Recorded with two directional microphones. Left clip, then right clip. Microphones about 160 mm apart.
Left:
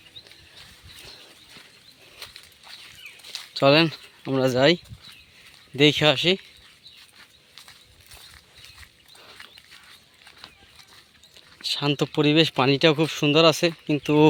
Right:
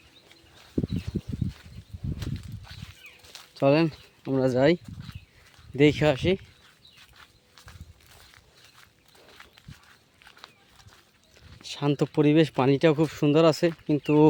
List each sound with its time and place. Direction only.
3.5 s speech: 10° right (ahead or behind)
11.6 s a sound: 20° right (ahead or behind)
12.1 s speech: 20° right (ahead or behind)